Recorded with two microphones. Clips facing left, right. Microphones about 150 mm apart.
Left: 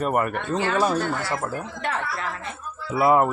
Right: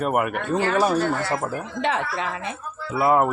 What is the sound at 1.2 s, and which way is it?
Speech, 20° right (ahead or behind).